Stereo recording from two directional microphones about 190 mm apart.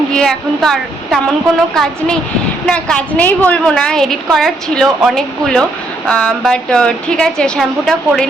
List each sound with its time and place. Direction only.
0.1 s a woman's voice: 5° left (ahead or behind)